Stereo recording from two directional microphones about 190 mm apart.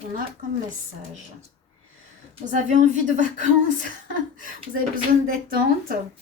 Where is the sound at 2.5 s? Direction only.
40° right (ahead or behind).